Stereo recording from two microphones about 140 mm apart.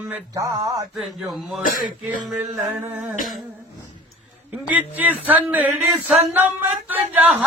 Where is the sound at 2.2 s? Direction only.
10° right (ahead or behind).